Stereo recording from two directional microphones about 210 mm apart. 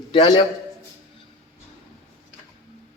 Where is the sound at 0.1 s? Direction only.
20° left (ahead or behind).